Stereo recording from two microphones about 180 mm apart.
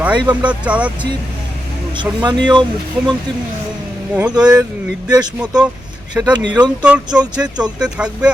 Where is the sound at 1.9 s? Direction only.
25° right (ahead or behind).